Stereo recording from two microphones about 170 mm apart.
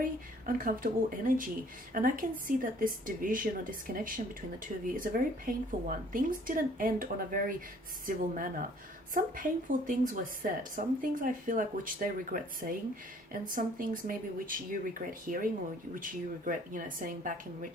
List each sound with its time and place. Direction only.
0.0 s speech: 55° right (ahead or behind)
16.5 s speech: 50° right (ahead or behind)